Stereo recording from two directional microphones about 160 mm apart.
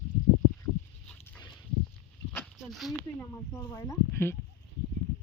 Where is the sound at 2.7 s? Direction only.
Centre (ahead or behind).